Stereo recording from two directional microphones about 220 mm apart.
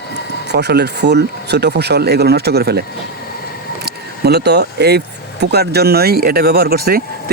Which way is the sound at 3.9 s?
45° right (ahead or behind).